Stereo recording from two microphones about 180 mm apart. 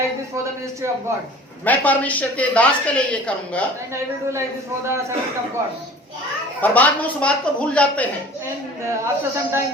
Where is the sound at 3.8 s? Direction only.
15° right (ahead or behind).